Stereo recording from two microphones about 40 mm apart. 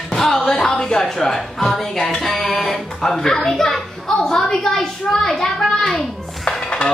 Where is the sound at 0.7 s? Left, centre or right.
Left.